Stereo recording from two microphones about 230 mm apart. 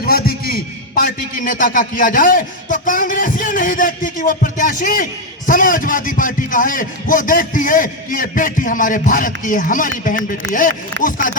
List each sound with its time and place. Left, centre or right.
0.0 s a man's voice: left
11.0 s a man's voice: left